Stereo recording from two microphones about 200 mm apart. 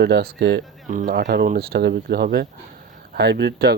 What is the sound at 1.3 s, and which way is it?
Speech, 50° right (ahead or behind).